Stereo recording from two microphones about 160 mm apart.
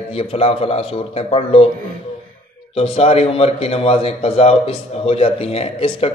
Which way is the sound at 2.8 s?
40° left (ahead or behind).